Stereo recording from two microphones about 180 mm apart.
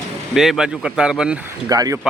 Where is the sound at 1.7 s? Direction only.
20° right (ahead or behind).